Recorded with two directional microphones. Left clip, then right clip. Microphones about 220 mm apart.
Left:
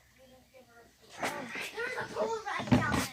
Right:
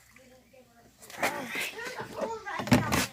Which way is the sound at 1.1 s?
45° right (ahead or behind).